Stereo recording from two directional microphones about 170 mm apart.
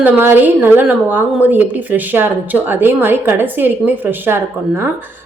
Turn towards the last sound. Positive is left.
turn(degrees=-15)  # may be behind; listen again after turning